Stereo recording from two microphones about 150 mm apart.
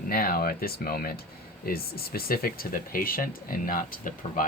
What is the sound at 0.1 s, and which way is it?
Speech, 85° left.